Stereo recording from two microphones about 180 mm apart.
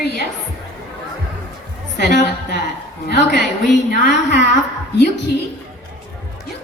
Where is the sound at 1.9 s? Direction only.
70° left (ahead or behind).